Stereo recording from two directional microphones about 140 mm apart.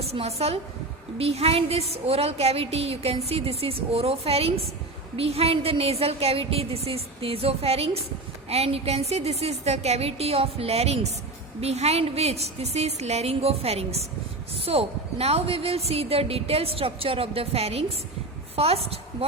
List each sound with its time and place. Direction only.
0.0 s a woman's voice: 45° right (ahead or behind)